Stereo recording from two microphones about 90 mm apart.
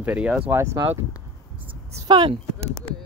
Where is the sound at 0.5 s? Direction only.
30° right (ahead or behind).